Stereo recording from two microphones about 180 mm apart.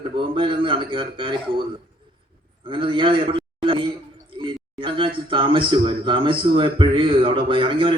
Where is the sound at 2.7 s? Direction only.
30° right (ahead or behind).